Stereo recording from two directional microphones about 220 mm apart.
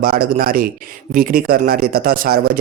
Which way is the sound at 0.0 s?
40° right (ahead or behind).